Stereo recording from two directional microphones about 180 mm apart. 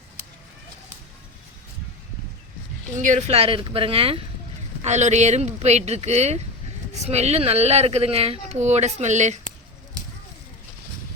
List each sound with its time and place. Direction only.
3.0 s speech: 40° right (ahead or behind)